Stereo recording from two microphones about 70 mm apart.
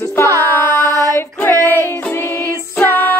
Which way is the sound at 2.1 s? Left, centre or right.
Left.